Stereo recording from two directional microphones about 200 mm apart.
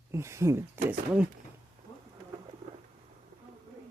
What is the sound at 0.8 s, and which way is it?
Speech, 10° right (ahead or behind).